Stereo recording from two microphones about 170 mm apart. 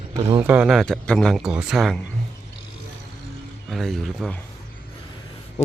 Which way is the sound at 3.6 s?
Centre (ahead or behind).